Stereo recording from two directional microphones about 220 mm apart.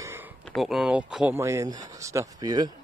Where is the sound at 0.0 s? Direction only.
10° right (ahead or behind).